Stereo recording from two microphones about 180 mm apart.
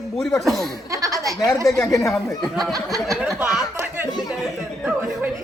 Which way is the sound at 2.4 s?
Centre (ahead or behind).